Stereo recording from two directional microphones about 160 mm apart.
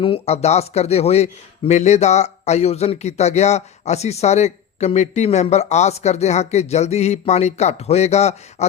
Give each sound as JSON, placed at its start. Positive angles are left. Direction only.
{"t": 0.0, "sound": "a man's voice", "side_deg": 40}